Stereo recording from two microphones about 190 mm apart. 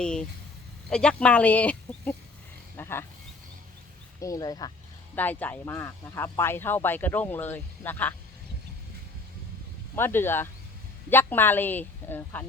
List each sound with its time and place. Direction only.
0.0 s speech: 5° left (ahead or behind)
4.2 s speech: 20° left (ahead or behind)
5.1 s speech: 10° left (ahead or behind)
9.9 s speech: 10° left (ahead or behind)